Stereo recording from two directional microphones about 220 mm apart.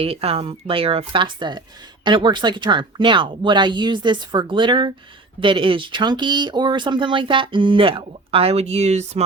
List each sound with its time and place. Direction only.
0.0 s speech: 25° right (ahead or behind)